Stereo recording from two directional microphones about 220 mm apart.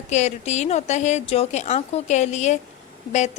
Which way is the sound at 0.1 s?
30° left (ahead or behind).